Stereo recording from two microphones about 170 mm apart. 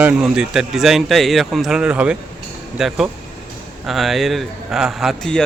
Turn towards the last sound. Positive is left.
turn(degrees=5)  # may be behind; listen again after turning